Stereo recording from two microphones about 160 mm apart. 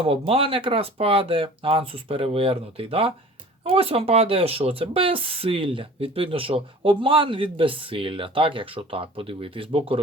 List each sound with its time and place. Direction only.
0.0 s speech: 35° right (ahead or behind)